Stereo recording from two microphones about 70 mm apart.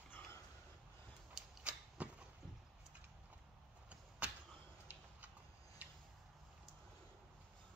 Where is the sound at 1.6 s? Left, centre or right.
Centre.